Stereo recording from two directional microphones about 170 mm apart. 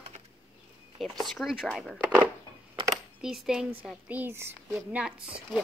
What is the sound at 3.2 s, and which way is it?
Speech, 5° right (ahead or behind).